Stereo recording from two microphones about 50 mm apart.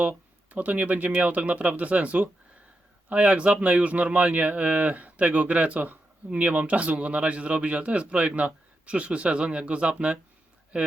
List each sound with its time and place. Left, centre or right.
0.0 s speech: right